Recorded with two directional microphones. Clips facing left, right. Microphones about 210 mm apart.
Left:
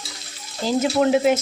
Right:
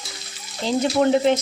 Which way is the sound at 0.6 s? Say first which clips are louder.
Even; 5° left (ahead or behind).